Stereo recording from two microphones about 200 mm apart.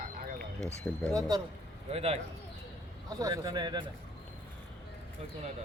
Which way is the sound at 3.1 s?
20° right (ahead or behind).